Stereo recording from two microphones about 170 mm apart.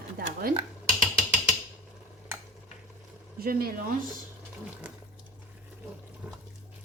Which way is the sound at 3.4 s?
60° right (ahead or behind).